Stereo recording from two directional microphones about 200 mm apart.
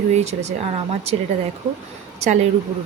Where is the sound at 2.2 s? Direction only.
35° right (ahead or behind).